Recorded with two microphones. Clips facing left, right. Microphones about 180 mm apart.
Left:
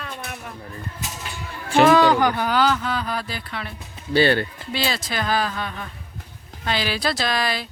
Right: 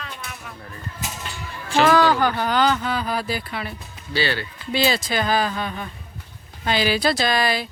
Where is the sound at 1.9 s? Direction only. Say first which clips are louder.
Left 1 dB; 20° left (ahead or behind); by 3.7 s 5° right (ahead or behind).